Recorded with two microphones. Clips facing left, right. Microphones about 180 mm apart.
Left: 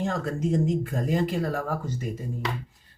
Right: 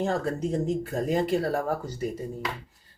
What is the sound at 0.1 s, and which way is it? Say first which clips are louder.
Speech: even; 35° right (ahead or behind).